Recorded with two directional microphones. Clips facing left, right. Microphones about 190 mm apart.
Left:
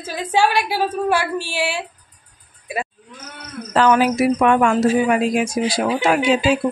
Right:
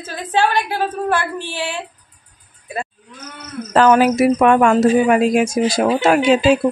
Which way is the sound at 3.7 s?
45° right (ahead or behind).